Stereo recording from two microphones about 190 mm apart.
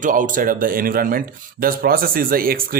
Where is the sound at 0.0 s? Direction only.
45° right (ahead or behind).